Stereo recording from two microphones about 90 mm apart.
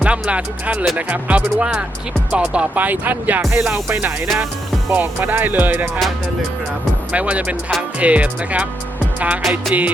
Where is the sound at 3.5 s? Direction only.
5° right (ahead or behind).